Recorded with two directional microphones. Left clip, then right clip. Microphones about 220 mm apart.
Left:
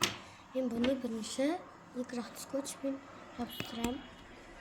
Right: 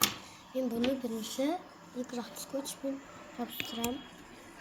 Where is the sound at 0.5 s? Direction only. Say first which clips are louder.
Right 1 dB; 15° right (ahead or behind).